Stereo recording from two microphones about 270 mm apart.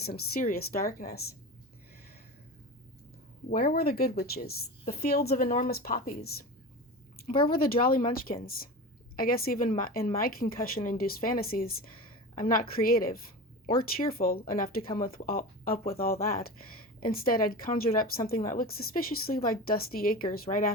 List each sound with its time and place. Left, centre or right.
0.0 s speech: left
3.5 s speech: left
7.3 s speech: centre
7.5 s speech: left